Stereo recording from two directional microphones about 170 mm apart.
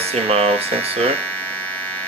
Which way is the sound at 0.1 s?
35° right (ahead or behind).